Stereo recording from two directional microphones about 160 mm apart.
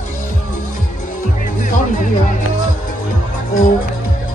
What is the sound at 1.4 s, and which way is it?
Music, 55° left (ahead or behind).